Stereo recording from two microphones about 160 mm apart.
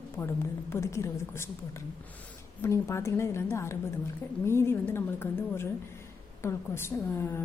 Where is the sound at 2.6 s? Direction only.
15° left (ahead or behind).